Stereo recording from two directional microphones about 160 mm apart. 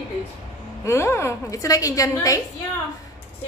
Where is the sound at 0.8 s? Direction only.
15° left (ahead or behind).